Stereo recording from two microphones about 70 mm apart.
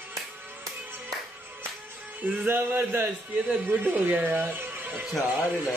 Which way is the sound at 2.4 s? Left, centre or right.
Right.